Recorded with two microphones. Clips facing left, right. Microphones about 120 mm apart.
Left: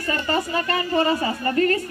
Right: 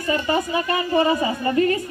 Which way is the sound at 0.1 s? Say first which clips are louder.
Right 2 dB; 15° right (ahead or behind).